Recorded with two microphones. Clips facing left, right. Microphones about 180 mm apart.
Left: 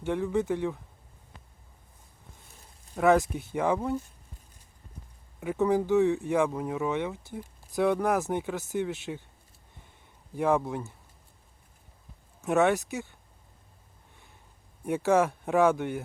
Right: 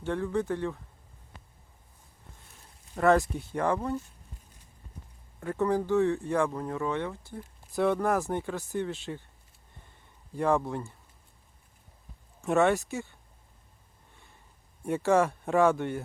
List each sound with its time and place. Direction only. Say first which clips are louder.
0.0 s speech: left 2 dB; 15° left (ahead or behind)
2.9 s speech: left 1 dB; 5° left (ahead or behind)
5.4 s speech: left 2 dB; 10° left (ahead or behind)
7.8 s speech: left 1 dB; centre (ahead or behind)
8.3 s speech: left 1 dB; 15° left (ahead or behind)
10.3 s speech: left 1 dB; 5° left (ahead or behind)
12.4 s speech: even; centre (ahead or behind)
14.8 s speech: even; centre (ahead or behind)